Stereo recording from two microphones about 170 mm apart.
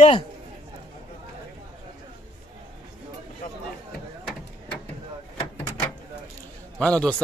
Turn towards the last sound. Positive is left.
turn(degrees=5)  # may be behind; listen again after turning